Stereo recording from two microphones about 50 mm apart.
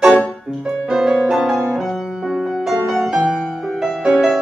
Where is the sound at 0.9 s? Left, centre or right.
Centre.